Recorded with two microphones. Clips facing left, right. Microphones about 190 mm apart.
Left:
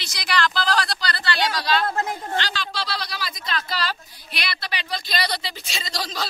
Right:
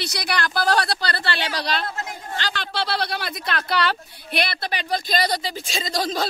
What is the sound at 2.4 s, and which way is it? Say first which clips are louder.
Speech: right 1 dB; 55° right (ahead or behind).